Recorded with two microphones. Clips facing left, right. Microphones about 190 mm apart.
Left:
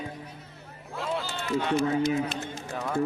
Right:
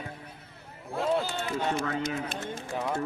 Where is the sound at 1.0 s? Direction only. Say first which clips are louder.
Right 4 dB; 50° right (ahead or behind).